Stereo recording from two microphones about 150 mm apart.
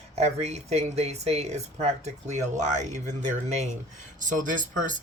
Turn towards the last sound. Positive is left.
turn(degrees=-60)  # may be behind; listen again after turning